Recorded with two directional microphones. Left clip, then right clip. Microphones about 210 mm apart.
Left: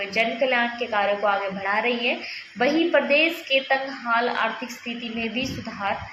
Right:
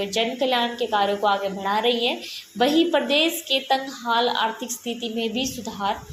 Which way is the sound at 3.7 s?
35° right (ahead or behind).